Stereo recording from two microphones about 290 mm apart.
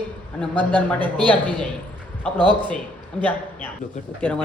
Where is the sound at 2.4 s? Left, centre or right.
Centre.